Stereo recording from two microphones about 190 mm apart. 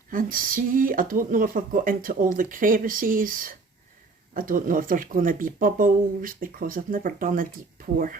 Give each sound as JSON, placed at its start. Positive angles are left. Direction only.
{"t": 0.1, "sound": "speech", "side_deg": -45}